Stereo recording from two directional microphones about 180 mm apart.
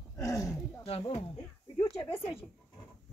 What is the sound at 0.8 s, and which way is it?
Speech, 35° left (ahead or behind).